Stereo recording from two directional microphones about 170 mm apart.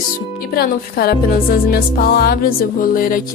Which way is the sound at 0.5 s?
65° left (ahead or behind).